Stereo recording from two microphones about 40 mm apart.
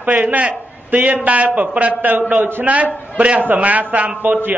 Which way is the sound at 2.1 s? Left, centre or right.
Right.